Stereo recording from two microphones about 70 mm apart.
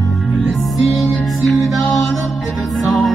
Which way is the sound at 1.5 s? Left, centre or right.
Centre.